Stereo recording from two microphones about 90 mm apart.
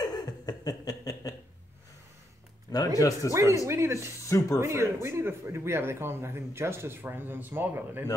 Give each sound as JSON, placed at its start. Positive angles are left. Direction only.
{"t": 0.0, "sound": "a sound", "side_deg": 50}
{"t": 2.7, "sound": "speech", "side_deg": 40}
{"t": 3.2, "sound": "speech", "side_deg": -35}